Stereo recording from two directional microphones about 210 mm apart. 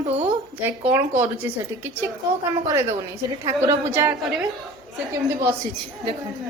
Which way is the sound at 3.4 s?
15° right (ahead or behind).